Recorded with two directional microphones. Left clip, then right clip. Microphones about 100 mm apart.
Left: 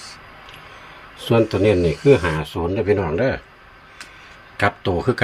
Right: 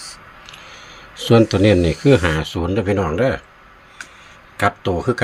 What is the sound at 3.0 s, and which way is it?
Speech, 65° right (ahead or behind).